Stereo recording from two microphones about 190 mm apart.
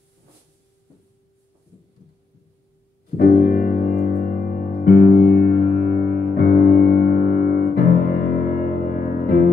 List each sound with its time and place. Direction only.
3.2 s music: 55° left (ahead or behind)